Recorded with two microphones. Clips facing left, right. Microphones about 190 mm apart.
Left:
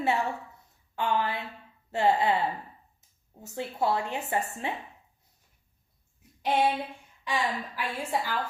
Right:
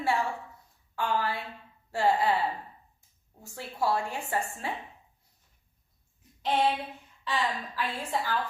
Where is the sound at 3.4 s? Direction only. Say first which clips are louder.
Left 2 dB; 20° left (ahead or behind).